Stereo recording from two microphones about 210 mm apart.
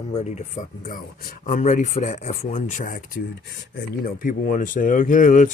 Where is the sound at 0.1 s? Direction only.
35° left (ahead or behind).